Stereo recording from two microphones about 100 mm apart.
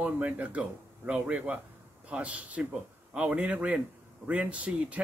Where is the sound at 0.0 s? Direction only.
15° right (ahead or behind).